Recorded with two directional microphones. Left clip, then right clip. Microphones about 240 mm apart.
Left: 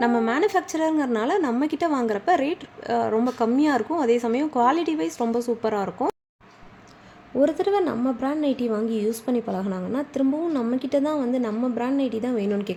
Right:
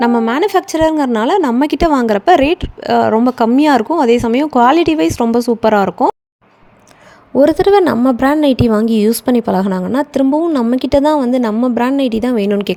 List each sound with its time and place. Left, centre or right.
0.0 s a woman's voice: right
7.3 s a woman's voice: right